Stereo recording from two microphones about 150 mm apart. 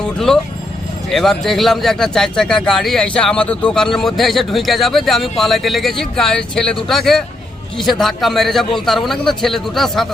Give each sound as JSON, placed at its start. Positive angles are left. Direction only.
{"t": 0.0, "sound": "a man's voice", "side_deg": 5}